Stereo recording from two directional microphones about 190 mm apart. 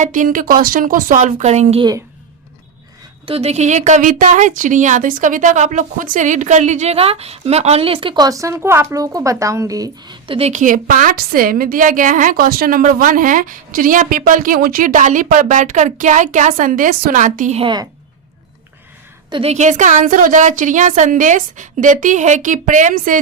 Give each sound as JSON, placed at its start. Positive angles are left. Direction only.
{"t": 0.0, "sound": "a woman's voice", "side_deg": -45}
{"t": 3.2, "sound": "speech", "side_deg": -30}
{"t": 19.3, "sound": "speech", "side_deg": -30}